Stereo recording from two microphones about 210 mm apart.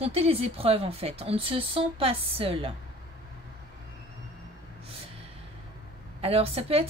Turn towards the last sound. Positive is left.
turn(degrees=-30)  # may be behind; listen again after turning